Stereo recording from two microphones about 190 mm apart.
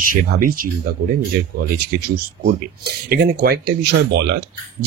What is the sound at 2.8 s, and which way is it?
Speech, 55° right (ahead or behind).